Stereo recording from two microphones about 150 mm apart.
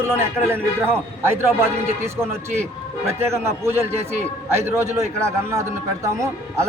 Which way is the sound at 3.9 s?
45° right (ahead or behind).